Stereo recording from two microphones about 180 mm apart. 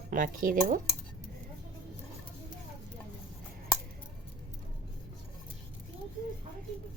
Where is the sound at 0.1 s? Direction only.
50° right (ahead or behind).